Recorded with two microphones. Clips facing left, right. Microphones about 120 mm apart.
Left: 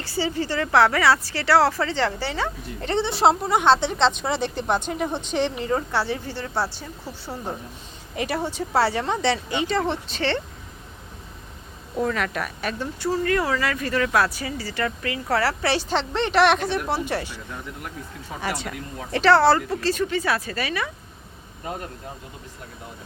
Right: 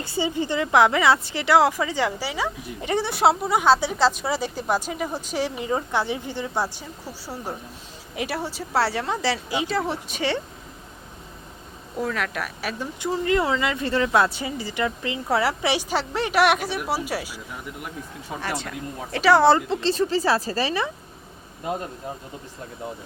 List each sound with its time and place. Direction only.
0.0 s a woman's voice: 20° right (ahead or behind)
11.9 s speech: centre (ahead or behind)
13.0 s a woman's voice: 20° right (ahead or behind); by 18.7 s centre (ahead or behind)
19.1 s speech: 10° right (ahead or behind); by 20.9 s 30° right (ahead or behind)